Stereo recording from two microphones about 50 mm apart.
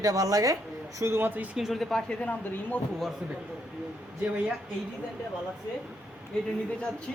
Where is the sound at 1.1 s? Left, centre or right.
Right.